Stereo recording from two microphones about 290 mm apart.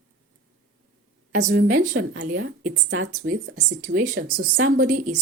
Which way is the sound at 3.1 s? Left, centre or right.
Right.